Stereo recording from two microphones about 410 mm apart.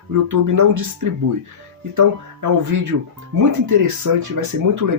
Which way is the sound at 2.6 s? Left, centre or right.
Right.